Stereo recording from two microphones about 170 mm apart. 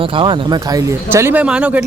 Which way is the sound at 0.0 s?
30° right (ahead or behind).